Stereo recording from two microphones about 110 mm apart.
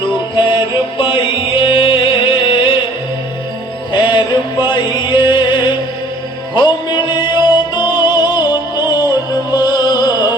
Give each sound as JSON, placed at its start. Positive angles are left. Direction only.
{"t": 0.9, "sound": "music", "side_deg": 50}
{"t": 3.9, "sound": "music", "side_deg": 45}